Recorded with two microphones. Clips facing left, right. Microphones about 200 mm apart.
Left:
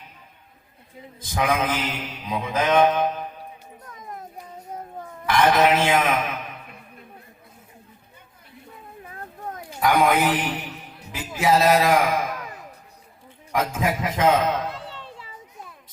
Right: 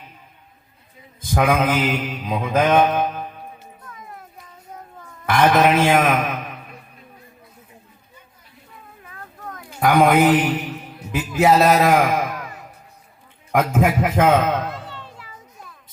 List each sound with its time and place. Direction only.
1.2 s mantra: 55° right (ahead or behind)
5.2 s a man's voice: 55° right (ahead or behind)
9.0 s a sound: 30° left (ahead or behind)
9.8 s a man's voice: 55° right (ahead or behind)
13.5 s mantra: 55° right (ahead or behind)
14.8 s children playing: 30° left (ahead or behind)